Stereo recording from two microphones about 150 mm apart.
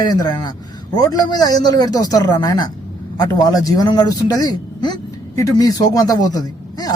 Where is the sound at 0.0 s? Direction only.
25° left (ahead or behind).